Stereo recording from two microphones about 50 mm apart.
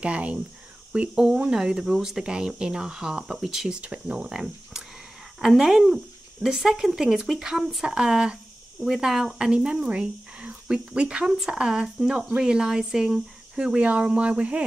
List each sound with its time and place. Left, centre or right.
0.0 s speech: right
1.1 s speech: centre
3.8 s speech: right
4.3 s speech: centre
11.2 s speech: centre
11.5 s speech: centre